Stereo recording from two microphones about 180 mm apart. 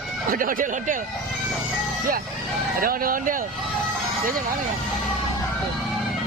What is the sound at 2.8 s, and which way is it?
Speech, 55° right (ahead or behind).